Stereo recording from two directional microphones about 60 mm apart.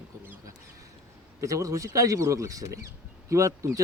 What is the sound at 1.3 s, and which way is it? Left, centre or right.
Speech, right.